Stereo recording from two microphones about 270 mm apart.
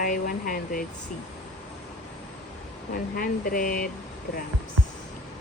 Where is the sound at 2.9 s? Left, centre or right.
Left.